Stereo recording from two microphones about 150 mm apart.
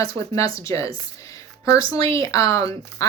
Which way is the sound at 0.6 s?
20° left (ahead or behind).